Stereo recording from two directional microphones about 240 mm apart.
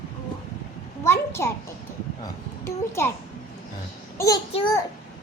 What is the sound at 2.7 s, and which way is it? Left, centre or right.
Speech, centre.